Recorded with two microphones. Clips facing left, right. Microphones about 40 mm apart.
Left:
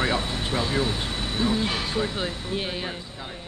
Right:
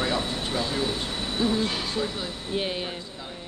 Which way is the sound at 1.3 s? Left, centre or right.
Centre.